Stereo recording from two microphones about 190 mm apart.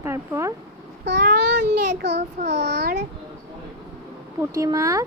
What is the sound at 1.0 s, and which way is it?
A child's voice, 65° right (ahead or behind).